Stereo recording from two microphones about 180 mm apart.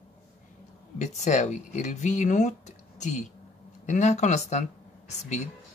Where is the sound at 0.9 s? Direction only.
40° left (ahead or behind).